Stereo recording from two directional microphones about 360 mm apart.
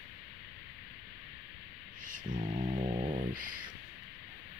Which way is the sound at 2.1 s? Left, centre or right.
Centre.